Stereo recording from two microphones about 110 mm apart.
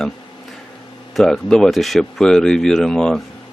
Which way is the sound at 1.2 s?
5° left (ahead or behind).